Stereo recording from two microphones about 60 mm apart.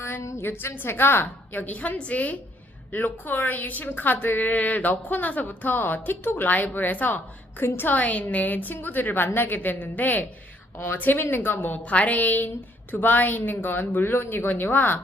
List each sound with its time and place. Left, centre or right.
0.3 s a woman's voice: left
11.9 s a woman's voice: left